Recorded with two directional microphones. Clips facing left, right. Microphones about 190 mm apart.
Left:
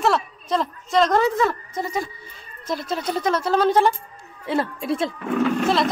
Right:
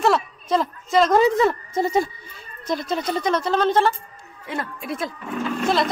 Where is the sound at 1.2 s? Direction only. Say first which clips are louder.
Right 3 dB; 20° right (ahead or behind).